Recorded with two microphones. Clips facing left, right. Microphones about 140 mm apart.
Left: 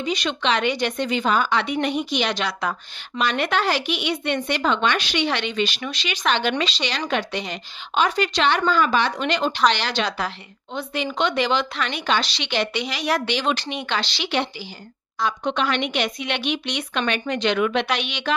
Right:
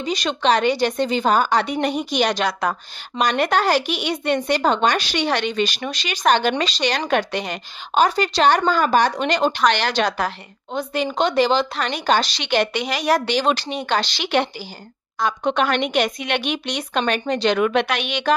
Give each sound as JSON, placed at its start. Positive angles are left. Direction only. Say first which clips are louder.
{"t": 0.0, "sound": "speech", "louder": "right 3 dB", "side_deg": -40}